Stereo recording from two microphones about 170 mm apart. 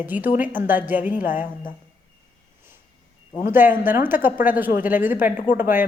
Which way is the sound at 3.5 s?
10° right (ahead or behind).